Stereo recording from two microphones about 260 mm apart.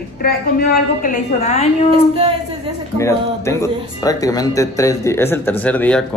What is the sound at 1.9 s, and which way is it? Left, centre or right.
Speech, right.